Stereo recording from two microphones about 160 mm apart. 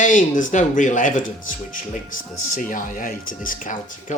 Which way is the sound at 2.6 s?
55° left (ahead or behind).